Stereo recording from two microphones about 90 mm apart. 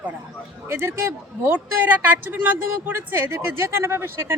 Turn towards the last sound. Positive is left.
turn(degrees=-25)  # may be behind; listen again after turning